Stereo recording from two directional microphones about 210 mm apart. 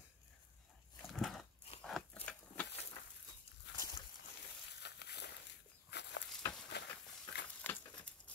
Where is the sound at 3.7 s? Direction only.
55° left (ahead or behind).